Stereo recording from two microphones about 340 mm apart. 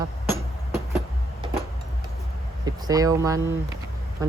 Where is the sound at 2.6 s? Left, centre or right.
Centre.